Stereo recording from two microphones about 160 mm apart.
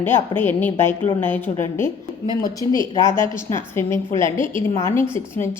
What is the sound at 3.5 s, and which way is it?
Speech, 15° left (ahead or behind).